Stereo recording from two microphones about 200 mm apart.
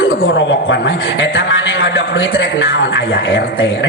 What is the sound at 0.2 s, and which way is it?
A man's voice, 70° left (ahead or behind).